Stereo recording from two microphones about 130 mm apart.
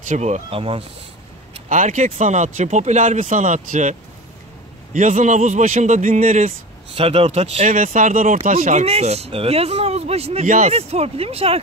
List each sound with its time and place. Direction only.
0.1 s speech: 60° right (ahead or behind); by 0.8 s 45° right (ahead or behind)
1.7 s speech: 75° right (ahead or behind)
4.9 s speech: 70° right (ahead or behind)
7.0 s speech: 50° right (ahead or behind)